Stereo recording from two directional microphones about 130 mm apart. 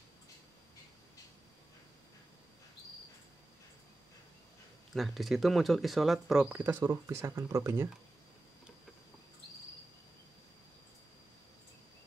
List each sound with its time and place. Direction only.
4.9 s speech: centre (ahead or behind)
6.5 s speech: 15° right (ahead or behind)